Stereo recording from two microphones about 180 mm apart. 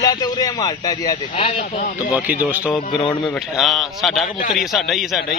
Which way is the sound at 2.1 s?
10° right (ahead or behind).